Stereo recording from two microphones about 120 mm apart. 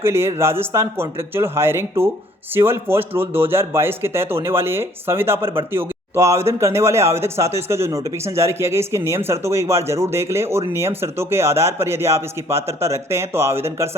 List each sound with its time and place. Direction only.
0.0 s speech: 20° right (ahead or behind)